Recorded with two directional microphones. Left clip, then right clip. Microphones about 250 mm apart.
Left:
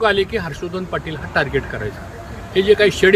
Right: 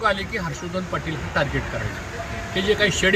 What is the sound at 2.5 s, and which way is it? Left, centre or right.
Speech, centre.